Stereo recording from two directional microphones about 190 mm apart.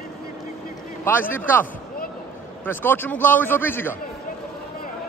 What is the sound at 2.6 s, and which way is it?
A man's voice, 10° left (ahead or behind).